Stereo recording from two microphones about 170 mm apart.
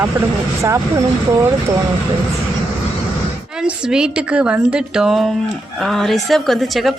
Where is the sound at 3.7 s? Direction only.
5° right (ahead or behind).